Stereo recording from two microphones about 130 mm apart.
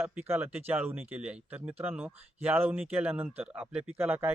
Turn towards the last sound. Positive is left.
turn(degrees=-15)  # may be behind; listen again after turning